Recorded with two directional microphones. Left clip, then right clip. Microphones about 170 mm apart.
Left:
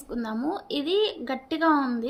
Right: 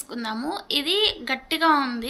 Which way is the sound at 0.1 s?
35° left (ahead or behind).